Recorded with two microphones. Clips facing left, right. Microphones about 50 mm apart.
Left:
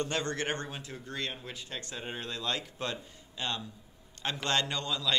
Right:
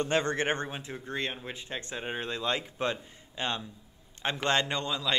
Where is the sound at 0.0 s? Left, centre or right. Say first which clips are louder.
Right 5 dB; right.